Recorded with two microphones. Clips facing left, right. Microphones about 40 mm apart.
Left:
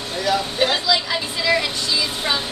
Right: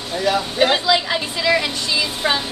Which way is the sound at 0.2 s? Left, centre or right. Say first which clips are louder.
Right 1 dB; right.